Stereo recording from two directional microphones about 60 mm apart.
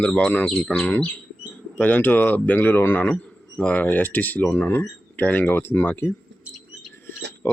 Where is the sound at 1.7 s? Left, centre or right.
Left.